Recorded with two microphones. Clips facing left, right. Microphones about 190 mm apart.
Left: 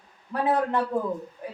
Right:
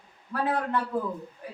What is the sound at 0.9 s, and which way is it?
Speech, 45° left (ahead or behind).